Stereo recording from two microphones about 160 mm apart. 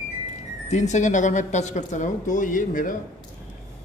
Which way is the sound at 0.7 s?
45° left (ahead or behind).